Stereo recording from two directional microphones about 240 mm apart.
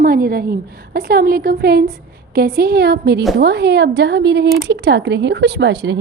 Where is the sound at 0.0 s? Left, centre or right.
Right.